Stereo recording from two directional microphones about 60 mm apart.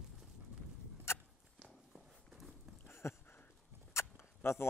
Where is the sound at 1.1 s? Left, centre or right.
Left.